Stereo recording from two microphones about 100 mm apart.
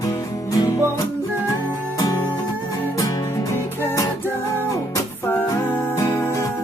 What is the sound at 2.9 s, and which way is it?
Music, 35° left (ahead or behind).